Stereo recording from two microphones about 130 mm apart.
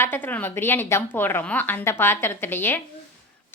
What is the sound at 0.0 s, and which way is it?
Speech, 15° left (ahead or behind).